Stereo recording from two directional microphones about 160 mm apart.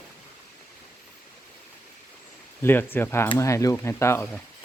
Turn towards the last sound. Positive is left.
turn(degrees=15)  # may be behind; listen again after turning